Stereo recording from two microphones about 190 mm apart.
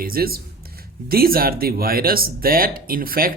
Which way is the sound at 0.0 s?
50° right (ahead or behind).